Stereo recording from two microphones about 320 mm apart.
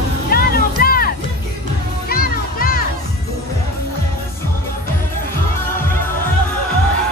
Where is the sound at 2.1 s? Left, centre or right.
Left.